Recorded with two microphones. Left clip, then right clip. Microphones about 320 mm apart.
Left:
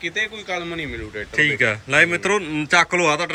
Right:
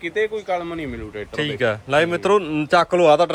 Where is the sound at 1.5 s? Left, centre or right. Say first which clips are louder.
Left 1 dB; centre.